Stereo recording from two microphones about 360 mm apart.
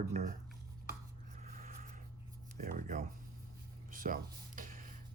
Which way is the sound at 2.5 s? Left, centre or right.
Right.